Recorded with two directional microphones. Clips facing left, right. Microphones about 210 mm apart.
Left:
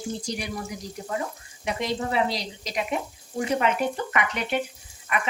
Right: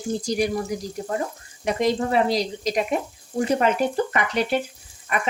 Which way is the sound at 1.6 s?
45° right (ahead or behind).